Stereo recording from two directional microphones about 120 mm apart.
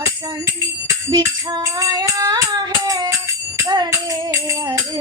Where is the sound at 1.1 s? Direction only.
35° right (ahead or behind).